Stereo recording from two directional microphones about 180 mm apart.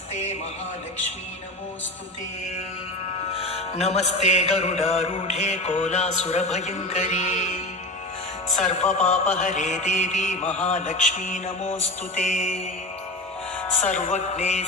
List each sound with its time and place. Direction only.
3.3 s music: 35° left (ahead or behind)
13.8 s music: 45° left (ahead or behind)